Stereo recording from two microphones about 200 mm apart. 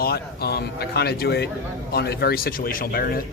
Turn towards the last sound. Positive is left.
turn(degrees=45)  # may be behind; listen again after turning